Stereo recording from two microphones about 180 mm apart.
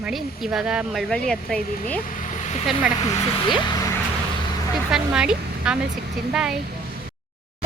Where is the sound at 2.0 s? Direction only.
45° left (ahead or behind).